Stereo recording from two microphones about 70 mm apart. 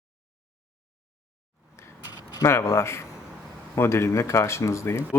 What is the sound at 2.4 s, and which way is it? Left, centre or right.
Speech, left.